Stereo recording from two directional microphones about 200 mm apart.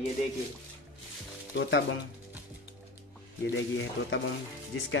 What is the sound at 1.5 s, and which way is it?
Speech, 70° left (ahead or behind).